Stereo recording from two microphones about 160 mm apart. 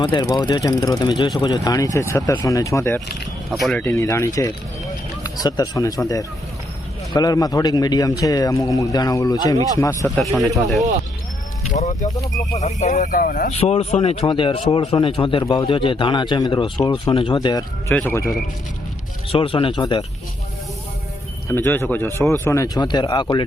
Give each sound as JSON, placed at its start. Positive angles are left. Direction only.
{"t": 0.0, "sound": "speech", "side_deg": 25}
{"t": 3.6, "sound": "speech", "side_deg": 0}
{"t": 3.8, "sound": "speech", "side_deg": 15}
{"t": 10.2, "sound": "speech", "side_deg": 0}
{"t": 11.7, "sound": "a man's voice", "side_deg": 50}
{"t": 13.5, "sound": "speech", "side_deg": 40}
{"t": 17.3, "sound": "speech", "side_deg": 25}
{"t": 17.9, "sound": "speech", "side_deg": 15}
{"t": 19.3, "sound": "speech", "side_deg": 35}
{"t": 21.5, "sound": "speech", "side_deg": 15}